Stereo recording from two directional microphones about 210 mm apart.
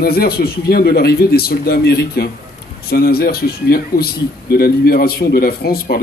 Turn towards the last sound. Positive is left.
turn(degrees=45)  # may be behind; listen again after turning